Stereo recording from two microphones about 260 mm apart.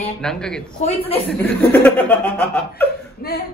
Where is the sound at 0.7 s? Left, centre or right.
Left.